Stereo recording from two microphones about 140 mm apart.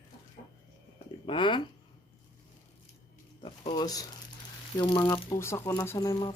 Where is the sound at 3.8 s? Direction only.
25° left (ahead or behind).